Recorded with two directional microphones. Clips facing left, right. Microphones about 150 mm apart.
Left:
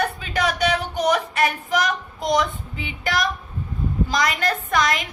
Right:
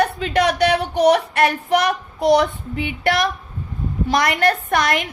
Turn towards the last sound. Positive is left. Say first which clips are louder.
# right 2 dB
turn(degrees=-60)  # may be behind; listen again after turning